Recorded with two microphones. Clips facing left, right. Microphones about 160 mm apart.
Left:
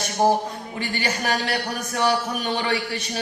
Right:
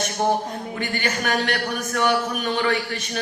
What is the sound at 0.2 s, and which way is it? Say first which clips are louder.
Speech: left 3 dB; 35° left (ahead or behind).